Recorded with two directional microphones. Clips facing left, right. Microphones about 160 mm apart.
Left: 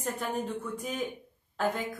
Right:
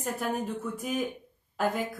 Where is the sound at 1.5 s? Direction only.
5° right (ahead or behind).